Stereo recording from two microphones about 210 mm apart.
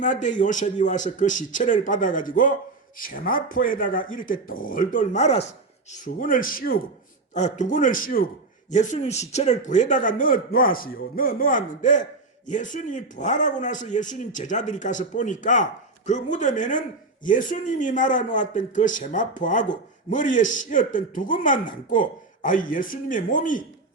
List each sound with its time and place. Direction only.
0.0 s speech: 35° left (ahead or behind)